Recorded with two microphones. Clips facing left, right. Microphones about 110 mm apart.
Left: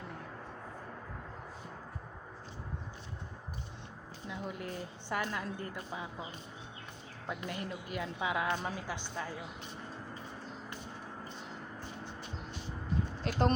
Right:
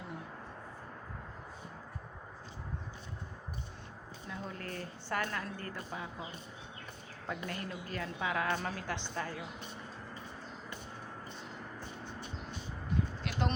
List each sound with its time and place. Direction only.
4.3 s a woman's voice: 15° left (ahead or behind)
7.3 s a woman's voice: 20° left (ahead or behind)
13.3 s speech: 35° left (ahead or behind)